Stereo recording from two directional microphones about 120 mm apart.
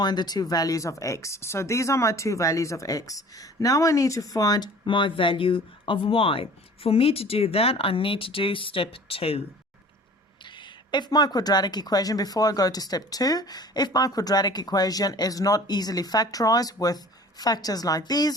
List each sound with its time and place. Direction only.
0.0 s speech: 35° left (ahead or behind); by 9.4 s 50° left (ahead or behind)
10.4 s speech: 40° left (ahead or behind)